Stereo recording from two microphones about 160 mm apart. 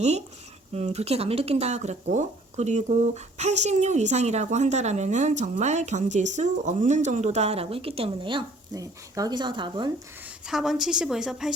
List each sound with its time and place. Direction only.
0.7 s speech: 40° right (ahead or behind)
10.2 s a woman's voice: 5° right (ahead or behind)